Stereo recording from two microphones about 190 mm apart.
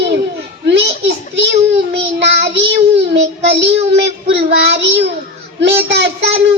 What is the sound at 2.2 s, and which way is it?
Child singing, 65° right (ahead or behind).